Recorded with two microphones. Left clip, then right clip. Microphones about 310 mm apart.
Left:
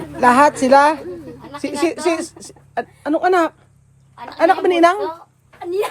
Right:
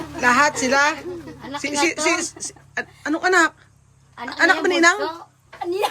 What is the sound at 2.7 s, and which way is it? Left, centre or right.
A woman's voice, centre.